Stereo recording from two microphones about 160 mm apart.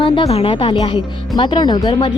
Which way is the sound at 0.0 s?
35° left (ahead or behind).